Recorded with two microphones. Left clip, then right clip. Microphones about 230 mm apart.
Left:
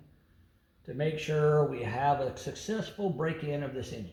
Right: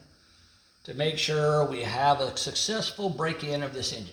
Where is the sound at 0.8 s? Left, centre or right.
Right.